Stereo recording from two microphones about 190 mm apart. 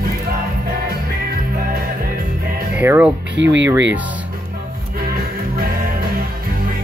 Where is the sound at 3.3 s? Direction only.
70° right (ahead or behind).